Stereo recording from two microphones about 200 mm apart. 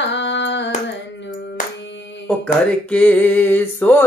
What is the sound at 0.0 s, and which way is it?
Hands, 65° left (ahead or behind).